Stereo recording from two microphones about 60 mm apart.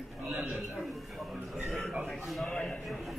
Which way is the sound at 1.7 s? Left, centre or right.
Centre.